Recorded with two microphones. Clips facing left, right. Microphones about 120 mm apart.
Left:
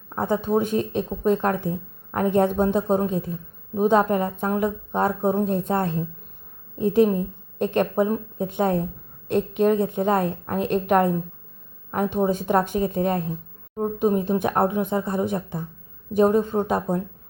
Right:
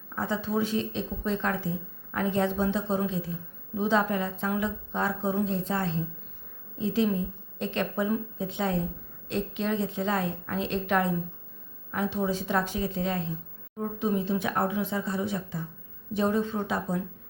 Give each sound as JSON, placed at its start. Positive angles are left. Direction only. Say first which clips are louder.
{"t": 0.1, "sound": "speech", "louder": "left 7 dB", "side_deg": 50}